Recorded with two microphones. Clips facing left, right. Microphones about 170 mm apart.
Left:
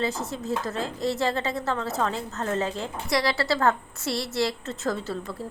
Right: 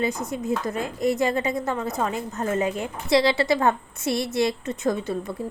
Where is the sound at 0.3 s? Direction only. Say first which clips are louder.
Right 3 dB; 15° right (ahead or behind).